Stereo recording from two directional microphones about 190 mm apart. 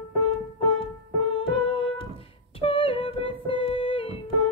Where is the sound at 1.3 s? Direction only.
30° left (ahead or behind).